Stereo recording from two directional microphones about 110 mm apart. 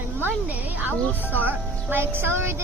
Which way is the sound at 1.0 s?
15° left (ahead or behind).